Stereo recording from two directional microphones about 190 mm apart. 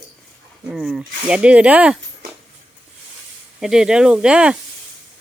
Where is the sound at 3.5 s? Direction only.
Centre (ahead or behind).